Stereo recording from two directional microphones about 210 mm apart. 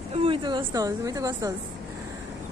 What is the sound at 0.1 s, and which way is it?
A woman's voice, 25° right (ahead or behind).